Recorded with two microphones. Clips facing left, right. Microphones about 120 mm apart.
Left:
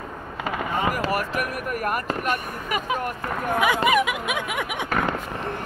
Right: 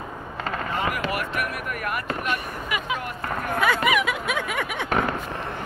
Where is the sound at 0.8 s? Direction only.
40° left (ahead or behind).